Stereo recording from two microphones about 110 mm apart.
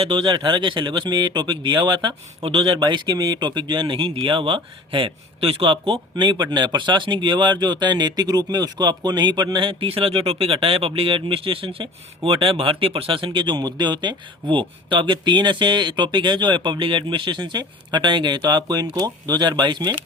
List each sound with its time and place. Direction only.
0.0 s speech: 55° right (ahead or behind)